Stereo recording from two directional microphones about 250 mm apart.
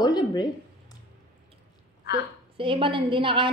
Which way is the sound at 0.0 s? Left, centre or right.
Centre.